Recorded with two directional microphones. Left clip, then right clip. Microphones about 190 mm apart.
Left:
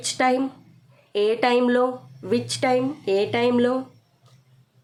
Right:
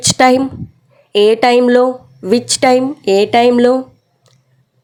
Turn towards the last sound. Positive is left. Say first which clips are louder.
# right 11 dB
turn(degrees=-35)  # may be behind; listen again after turning